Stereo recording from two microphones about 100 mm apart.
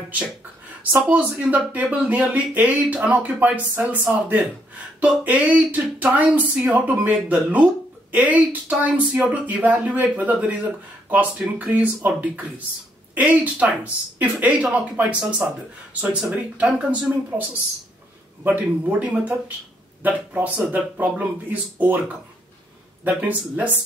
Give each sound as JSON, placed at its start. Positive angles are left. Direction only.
{"t": 0.9, "sound": "speech", "side_deg": -15}
{"t": 18.4, "sound": "speech", "side_deg": -15}
{"t": 23.0, "sound": "speech", "side_deg": -15}